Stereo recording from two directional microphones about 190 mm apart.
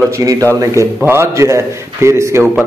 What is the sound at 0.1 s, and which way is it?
A man's voice, 15° right (ahead or behind).